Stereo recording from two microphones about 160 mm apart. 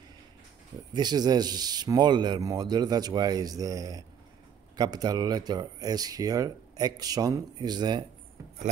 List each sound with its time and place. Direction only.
0.9 s speech: 25° right (ahead or behind)